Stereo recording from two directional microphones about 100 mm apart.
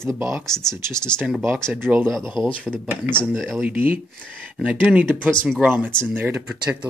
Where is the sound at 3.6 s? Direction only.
20° right (ahead or behind).